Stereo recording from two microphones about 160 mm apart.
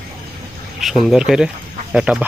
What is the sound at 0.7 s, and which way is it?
Speech, centre (ahead or behind).